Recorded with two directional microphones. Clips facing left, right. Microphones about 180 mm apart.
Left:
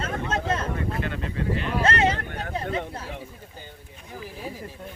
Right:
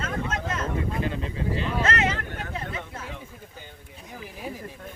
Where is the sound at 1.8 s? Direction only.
30° left (ahead or behind).